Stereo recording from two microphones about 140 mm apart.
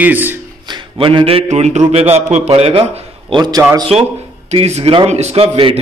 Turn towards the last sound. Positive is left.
turn(degrees=-40)  # may be behind; listen again after turning